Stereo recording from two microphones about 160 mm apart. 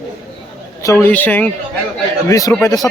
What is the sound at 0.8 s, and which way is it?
Speech, 15° left (ahead or behind).